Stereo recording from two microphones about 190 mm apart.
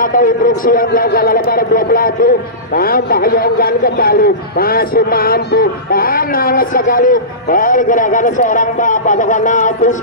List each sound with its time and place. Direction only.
0.0 s a man's voice: 45° left (ahead or behind)